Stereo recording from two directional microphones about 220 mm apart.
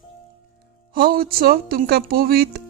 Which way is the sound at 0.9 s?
45° right (ahead or behind).